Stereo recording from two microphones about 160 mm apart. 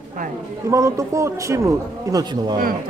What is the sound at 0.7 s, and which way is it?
Speech, 20° right (ahead or behind).